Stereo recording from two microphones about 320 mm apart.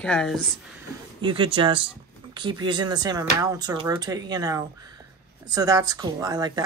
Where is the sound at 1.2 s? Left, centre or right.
Centre.